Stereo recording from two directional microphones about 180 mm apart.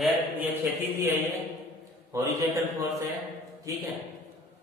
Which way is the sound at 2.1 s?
15° right (ahead or behind).